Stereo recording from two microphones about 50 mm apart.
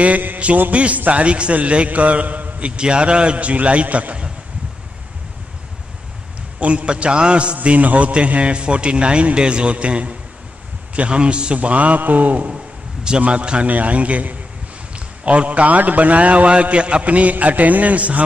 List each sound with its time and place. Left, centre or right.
0.0 s a sound: right
0.6 s a man's voice: right
6.6 s a man's voice: right